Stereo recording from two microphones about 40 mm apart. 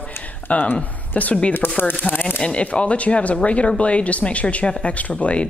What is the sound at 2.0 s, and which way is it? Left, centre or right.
Speech, left.